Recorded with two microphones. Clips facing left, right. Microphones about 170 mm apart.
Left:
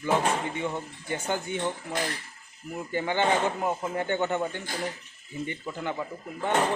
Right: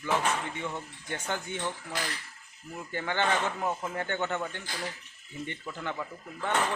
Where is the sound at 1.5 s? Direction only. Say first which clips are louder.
Left 5 dB; 10° left (ahead or behind).